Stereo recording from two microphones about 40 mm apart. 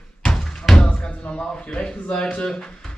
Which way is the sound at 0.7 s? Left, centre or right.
Left.